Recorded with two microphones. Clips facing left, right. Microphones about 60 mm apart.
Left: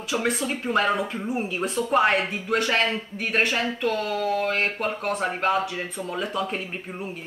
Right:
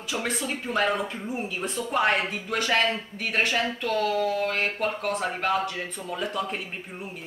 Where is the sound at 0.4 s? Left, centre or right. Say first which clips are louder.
Left 3 dB; centre.